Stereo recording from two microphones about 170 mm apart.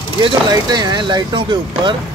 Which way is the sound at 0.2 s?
25° right (ahead or behind).